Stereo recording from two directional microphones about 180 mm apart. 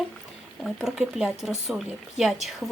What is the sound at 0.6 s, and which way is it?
Speech, centre (ahead or behind).